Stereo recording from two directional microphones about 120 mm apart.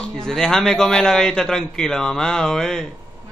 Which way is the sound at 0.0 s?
5° left (ahead or behind).